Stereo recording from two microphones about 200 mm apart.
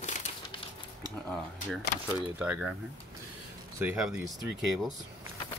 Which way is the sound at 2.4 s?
5° right (ahead or behind).